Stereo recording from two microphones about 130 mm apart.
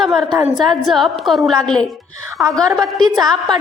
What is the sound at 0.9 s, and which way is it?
A woman's voice, centre (ahead or behind).